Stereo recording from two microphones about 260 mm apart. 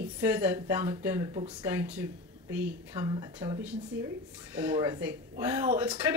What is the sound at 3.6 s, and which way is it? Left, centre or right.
Speech, centre.